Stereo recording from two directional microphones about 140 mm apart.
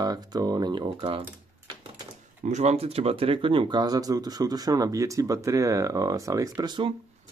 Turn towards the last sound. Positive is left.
turn(degrees=-30)  # may be behind; listen again after turning